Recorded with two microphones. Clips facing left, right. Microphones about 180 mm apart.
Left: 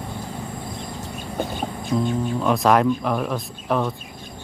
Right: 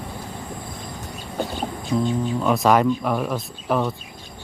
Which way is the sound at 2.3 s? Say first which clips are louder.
Even; centre (ahead or behind).